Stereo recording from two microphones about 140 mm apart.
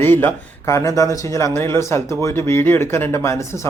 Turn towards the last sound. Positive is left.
turn(degrees=20)  # may be behind; listen again after turning